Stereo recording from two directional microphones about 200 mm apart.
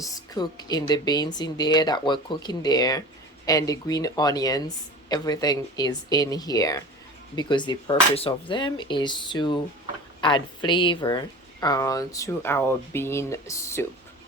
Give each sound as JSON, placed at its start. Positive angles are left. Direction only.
{"t": 0.0, "sound": "speech", "side_deg": 20}